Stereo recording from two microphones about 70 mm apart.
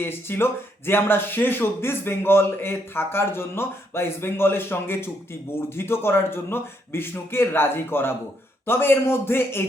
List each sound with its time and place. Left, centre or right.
0.0 s speech: left